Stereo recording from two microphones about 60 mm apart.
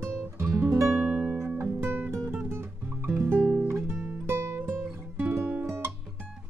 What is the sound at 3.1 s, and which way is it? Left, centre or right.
Music, right.